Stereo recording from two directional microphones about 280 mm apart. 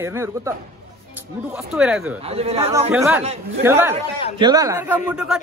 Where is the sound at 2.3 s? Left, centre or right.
Right.